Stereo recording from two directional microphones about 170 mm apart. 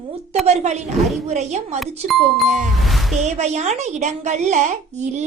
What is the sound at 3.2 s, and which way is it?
A woman's voice, 40° right (ahead or behind).